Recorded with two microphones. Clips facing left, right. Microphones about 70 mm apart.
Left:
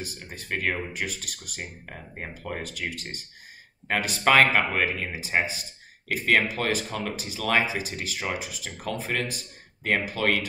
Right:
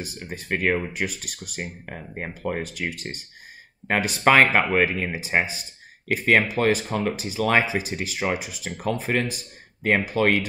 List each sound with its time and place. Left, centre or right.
0.3 s speech: right